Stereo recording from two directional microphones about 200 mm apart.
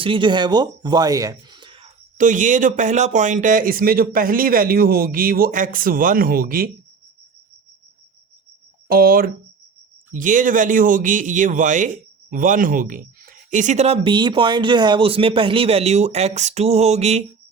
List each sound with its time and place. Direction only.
0.0 s speech: 25° right (ahead or behind)
2.1 s speech: 40° right (ahead or behind)
8.9 s speech: 45° right (ahead or behind)